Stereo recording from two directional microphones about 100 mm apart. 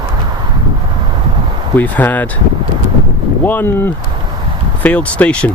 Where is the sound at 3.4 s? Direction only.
20° left (ahead or behind).